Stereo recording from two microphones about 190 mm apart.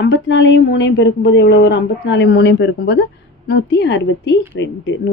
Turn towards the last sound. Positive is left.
turn(degrees=70)  # may be behind; listen again after turning